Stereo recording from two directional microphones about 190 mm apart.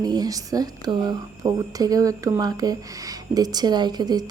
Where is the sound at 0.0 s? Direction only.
20° right (ahead or behind).